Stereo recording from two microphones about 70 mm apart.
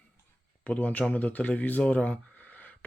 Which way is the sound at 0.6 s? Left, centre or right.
Left.